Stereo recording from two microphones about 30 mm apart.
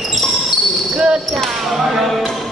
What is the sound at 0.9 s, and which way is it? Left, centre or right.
Basketball bounce, right.